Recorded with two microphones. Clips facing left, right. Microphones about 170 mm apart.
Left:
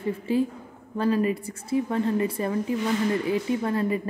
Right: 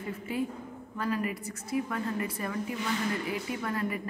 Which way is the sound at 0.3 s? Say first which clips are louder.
Left 7 dB; 30° left (ahead or behind).